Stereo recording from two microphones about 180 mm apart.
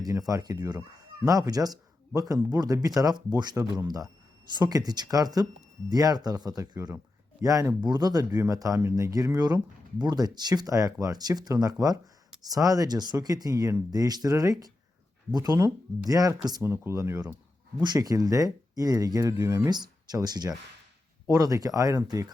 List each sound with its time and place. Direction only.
0.0 s speech: 20° right (ahead or behind)